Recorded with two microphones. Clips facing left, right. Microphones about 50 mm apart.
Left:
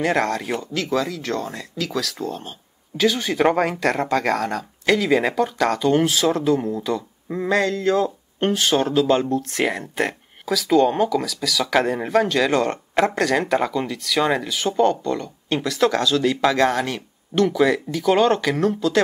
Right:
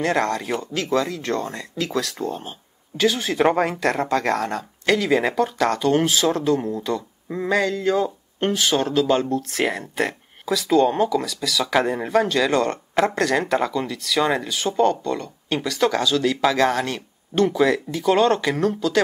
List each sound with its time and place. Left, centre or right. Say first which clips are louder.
0.0 s speech: left 1 dB; centre
0.7 s speech: right 1 dB; centre
8.4 s speech: left 1 dB; centre
15.5 s speech: left 1 dB; centre